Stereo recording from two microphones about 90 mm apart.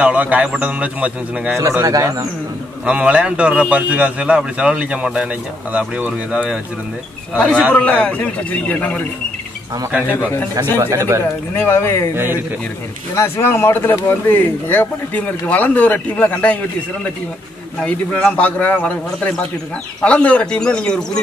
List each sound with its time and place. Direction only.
0.0 s a man's voice: 15° right (ahead or behind)
1.6 s speech: 35° right (ahead or behind)
2.8 s a man's voice: 10° right (ahead or behind)
7.3 s a man's voice: 10° left (ahead or behind)
9.8 s a man's voice: 10° right (ahead or behind)
10.8 s speech: 35° right (ahead or behind)
11.5 s speech: 25° left (ahead or behind)
13.1 s speech: 30° left (ahead or behind)
17.7 s a man's voice: 10° left (ahead or behind)